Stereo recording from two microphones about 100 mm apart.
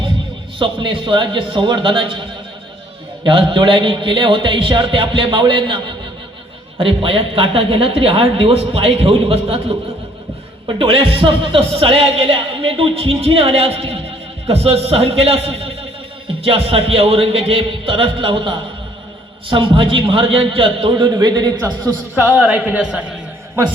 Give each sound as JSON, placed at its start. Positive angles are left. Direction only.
{"t": 0.6, "sound": "a man's voice", "side_deg": -55}
{"t": 3.2, "sound": "a man's voice", "side_deg": -55}
{"t": 10.8, "sound": "a man's voice", "side_deg": -65}
{"t": 16.4, "sound": "a man's voice", "side_deg": -70}
{"t": 22.2, "sound": "speech", "side_deg": -15}